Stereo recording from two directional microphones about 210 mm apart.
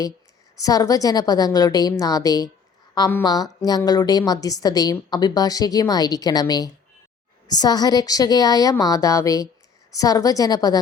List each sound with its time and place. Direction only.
0.6 s a woman's voice: 15° left (ahead or behind)